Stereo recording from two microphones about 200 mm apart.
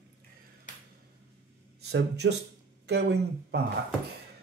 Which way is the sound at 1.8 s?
55° right (ahead or behind).